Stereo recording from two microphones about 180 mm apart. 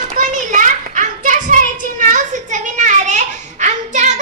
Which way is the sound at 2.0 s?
45° right (ahead or behind).